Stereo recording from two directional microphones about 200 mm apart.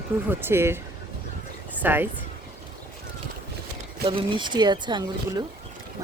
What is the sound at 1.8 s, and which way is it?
Speech, 10° right (ahead or behind).